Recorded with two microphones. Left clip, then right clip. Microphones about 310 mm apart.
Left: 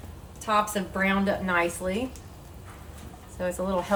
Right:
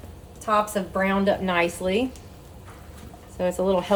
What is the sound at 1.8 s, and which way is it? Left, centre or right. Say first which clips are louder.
Speech: right 5 dB; right.